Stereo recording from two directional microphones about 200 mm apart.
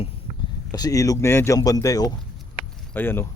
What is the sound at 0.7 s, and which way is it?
Speech, 20° left (ahead or behind).